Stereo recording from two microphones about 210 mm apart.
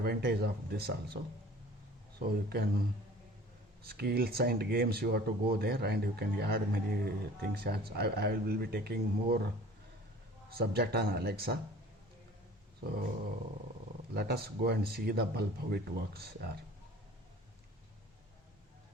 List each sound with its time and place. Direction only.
0.0 s speech: 50° right (ahead or behind)
3.8 s speech: 50° right (ahead or behind)
10.5 s speech: 50° right (ahead or behind)
14.1 s speech: 50° right (ahead or behind)